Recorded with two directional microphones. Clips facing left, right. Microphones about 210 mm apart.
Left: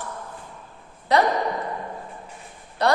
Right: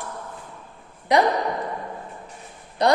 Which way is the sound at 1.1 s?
15° right (ahead or behind).